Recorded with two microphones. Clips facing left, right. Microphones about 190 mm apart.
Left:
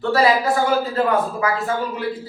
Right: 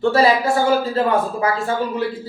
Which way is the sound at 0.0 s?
30° right (ahead or behind).